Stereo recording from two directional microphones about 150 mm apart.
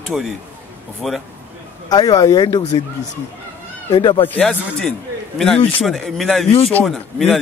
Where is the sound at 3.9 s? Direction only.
30° left (ahead or behind).